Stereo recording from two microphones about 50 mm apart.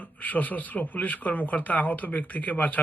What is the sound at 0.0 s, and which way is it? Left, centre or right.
Speech, left.